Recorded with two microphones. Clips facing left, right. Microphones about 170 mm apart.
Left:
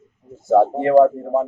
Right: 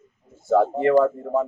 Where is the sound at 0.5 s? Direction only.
35° left (ahead or behind).